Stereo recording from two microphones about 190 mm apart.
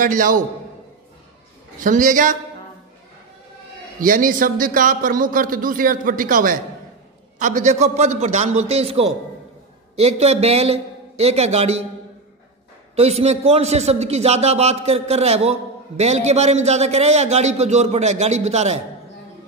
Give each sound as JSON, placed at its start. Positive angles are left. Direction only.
{"t": 0.0, "sound": "speech", "side_deg": -45}
{"t": 1.8, "sound": "speech", "side_deg": -40}
{"t": 4.0, "sound": "a man's voice", "side_deg": -45}
{"t": 12.9, "sound": "a man's voice", "side_deg": -35}